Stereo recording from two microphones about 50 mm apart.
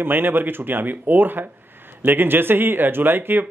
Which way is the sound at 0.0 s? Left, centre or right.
Right.